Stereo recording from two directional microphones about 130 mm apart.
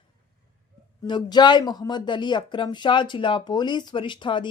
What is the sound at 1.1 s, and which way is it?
Speech, 35° left (ahead or behind).